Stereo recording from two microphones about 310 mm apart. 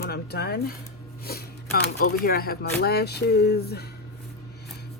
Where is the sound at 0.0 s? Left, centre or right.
Left.